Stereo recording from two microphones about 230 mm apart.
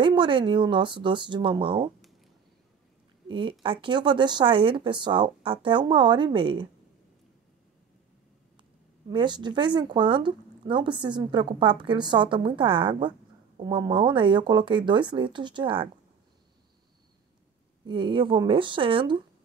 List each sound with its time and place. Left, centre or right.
0.0 s speech: right
3.3 s speech: right
9.1 s speech: centre
17.8 s speech: right